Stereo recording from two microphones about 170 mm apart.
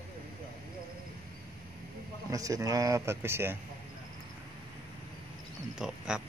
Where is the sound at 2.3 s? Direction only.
20° right (ahead or behind).